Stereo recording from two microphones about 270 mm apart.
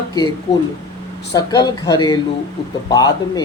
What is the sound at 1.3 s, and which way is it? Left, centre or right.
Speech, centre.